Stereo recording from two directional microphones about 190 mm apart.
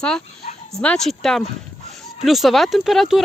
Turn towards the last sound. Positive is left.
turn(degrees=0)  # may be behind; listen again after turning